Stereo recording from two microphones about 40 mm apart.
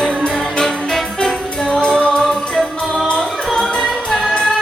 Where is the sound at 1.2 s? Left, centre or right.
Centre.